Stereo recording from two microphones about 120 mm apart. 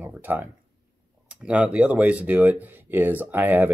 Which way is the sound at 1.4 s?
10° right (ahead or behind).